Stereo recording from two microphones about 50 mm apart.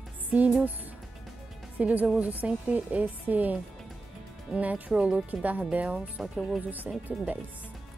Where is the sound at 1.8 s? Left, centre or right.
Right.